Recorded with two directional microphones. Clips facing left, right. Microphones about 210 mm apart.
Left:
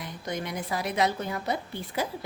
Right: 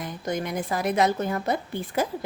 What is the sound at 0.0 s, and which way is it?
A woman's voice, 50° right (ahead or behind).